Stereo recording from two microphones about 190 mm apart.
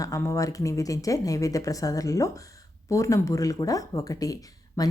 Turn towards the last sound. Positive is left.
turn(degrees=20)  # may be behind; listen again after turning